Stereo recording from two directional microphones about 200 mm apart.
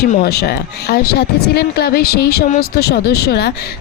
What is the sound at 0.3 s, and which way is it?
Speech, 50° left (ahead or behind).